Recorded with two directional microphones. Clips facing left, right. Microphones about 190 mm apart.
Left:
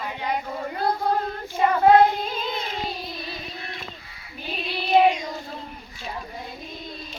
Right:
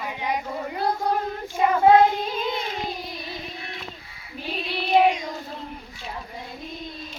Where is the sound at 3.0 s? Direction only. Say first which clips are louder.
Even; 15° right (ahead or behind).